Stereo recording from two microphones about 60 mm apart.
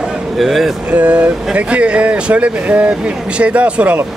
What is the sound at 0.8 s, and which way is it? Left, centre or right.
Speech, right.